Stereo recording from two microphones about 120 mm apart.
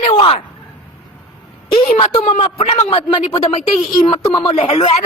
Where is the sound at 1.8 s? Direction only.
60° left (ahead or behind).